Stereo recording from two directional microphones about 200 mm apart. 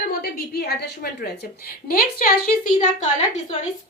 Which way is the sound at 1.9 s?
45° left (ahead or behind).